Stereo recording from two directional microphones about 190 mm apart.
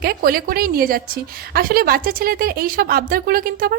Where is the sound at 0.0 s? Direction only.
50° right (ahead or behind).